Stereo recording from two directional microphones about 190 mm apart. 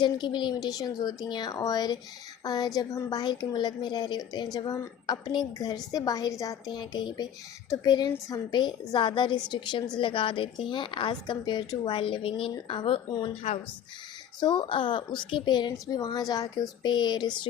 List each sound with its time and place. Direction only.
0.0 s a woman's voice: 25° left (ahead or behind)
14.4 s a woman's voice: 25° left (ahead or behind)